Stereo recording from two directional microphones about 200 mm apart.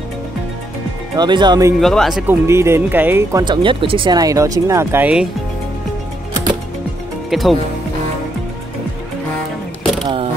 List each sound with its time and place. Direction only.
1.1 s speech: 20° right (ahead or behind)
1.8 s speech: centre (ahead or behind)
7.2 s speech: centre (ahead or behind)